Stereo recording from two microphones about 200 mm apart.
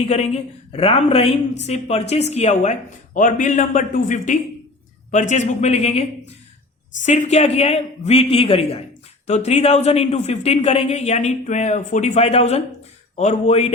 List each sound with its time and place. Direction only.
0.0 s speech: 30° left (ahead or behind)